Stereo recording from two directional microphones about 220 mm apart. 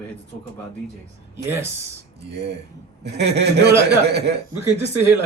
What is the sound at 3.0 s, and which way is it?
Speech, 50° right (ahead or behind).